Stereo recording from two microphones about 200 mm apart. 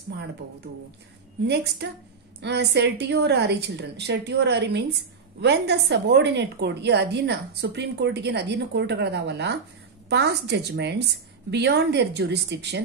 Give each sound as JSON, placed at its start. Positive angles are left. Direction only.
{"t": 1.5, "sound": "a woman's voice", "side_deg": -55}